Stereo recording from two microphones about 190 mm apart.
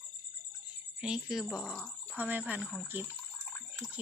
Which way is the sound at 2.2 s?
10° right (ahead or behind).